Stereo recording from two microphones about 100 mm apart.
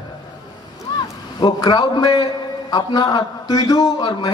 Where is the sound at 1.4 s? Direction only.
45° left (ahead or behind).